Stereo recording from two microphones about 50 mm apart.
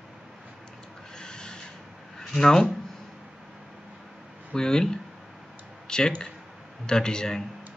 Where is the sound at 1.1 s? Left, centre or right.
Centre.